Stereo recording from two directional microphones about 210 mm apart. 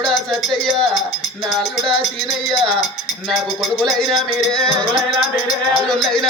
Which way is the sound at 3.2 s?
Centre (ahead or behind).